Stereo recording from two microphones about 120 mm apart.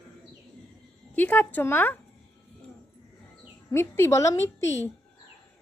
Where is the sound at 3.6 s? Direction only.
20° left (ahead or behind).